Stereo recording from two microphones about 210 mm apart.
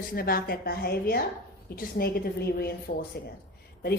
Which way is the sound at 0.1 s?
45° left (ahead or behind).